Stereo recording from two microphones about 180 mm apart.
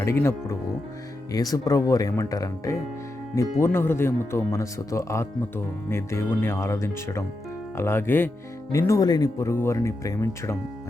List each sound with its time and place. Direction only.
0.0 s speech: 15° left (ahead or behind)